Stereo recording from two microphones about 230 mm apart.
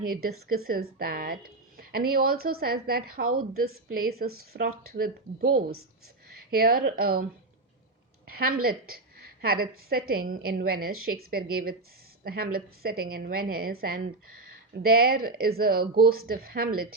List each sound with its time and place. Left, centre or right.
0.1 s a woman's voice: right
8.3 s a woman's voice: right